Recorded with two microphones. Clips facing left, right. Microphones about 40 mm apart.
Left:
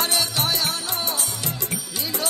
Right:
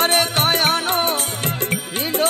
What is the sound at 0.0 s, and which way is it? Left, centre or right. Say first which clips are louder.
Music: right 6 dB; right.